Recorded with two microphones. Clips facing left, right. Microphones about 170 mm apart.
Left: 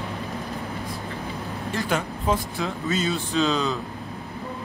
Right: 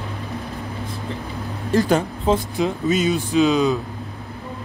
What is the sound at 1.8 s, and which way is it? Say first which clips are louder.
Speech: right 9 dB; 35° right (ahead or behind).